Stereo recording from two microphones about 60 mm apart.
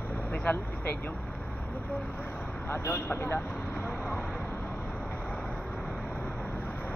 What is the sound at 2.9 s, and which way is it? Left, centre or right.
Speech, left.